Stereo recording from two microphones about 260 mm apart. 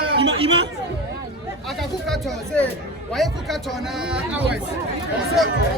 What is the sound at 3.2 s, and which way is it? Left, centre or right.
Speech, centre.